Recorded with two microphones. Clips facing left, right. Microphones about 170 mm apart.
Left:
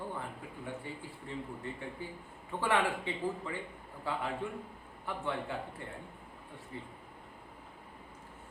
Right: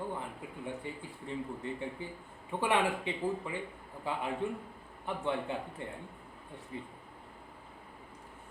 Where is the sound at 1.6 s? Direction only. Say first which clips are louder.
Right 3 dB; 20° right (ahead or behind).